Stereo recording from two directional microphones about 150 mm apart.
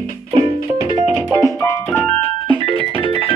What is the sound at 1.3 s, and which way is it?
Music, 20° left (ahead or behind).